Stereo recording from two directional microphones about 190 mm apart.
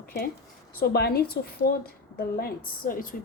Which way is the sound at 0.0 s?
55° left (ahead or behind).